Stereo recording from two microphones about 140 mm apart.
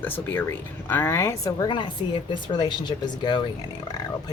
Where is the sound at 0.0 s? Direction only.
15° left (ahead or behind).